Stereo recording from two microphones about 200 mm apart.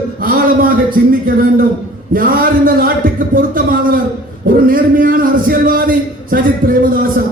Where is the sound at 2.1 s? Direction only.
45° right (ahead or behind).